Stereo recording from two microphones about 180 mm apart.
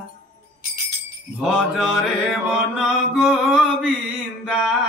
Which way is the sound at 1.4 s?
5° right (ahead or behind).